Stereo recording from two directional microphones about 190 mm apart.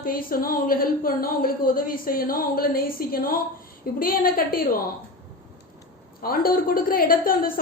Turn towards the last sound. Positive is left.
turn(degrees=50)  # may be behind; listen again after turning